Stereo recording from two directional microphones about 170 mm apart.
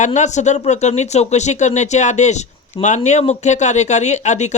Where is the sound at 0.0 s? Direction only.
45° left (ahead or behind).